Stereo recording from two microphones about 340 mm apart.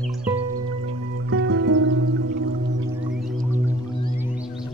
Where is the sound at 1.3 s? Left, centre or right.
Right.